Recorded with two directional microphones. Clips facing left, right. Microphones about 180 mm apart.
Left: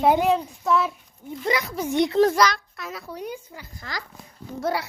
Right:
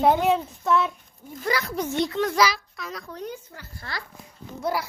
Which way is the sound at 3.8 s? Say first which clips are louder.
Left 1 dB; 90° left.